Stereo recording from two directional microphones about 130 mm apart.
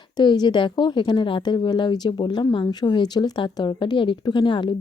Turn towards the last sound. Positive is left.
turn(degrees=40)  # may be behind; listen again after turning